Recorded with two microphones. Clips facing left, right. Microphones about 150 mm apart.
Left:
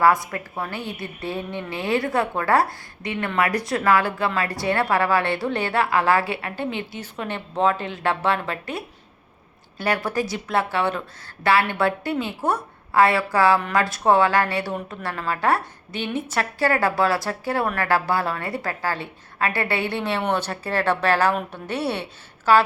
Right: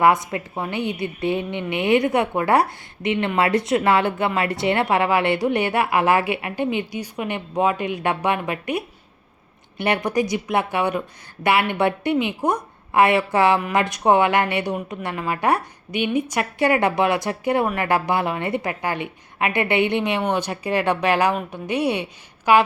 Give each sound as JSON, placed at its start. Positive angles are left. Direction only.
{"t": 0.0, "sound": "a woman's voice", "side_deg": -20}